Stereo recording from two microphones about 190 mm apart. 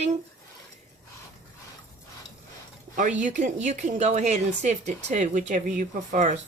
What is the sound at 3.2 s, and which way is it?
A woman's voice, 40° right (ahead or behind).